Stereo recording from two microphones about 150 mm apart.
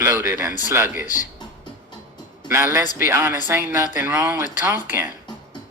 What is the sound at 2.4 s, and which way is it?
Speech, 15° right (ahead or behind).